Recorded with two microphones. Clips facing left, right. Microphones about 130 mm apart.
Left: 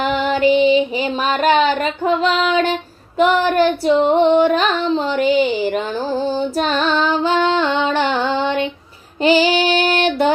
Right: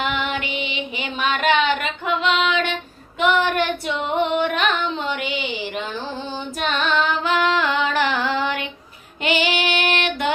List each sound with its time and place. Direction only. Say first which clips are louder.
0.0 s female singing: left 9 dB; 40° left (ahead or behind)
9.2 s child singing: left 8 dB; 35° left (ahead or behind)